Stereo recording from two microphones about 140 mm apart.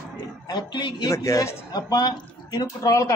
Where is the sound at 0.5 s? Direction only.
30° left (ahead or behind).